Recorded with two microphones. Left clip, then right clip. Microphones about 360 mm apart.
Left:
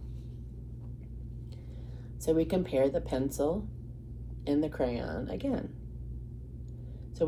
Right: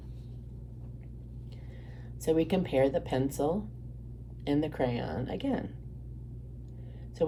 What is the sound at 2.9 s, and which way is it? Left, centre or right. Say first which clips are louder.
Speech: right 1 dB; right.